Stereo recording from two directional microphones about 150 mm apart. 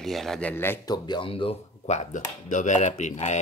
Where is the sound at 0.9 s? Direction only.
30° left (ahead or behind); by 3.4 s 50° left (ahead or behind).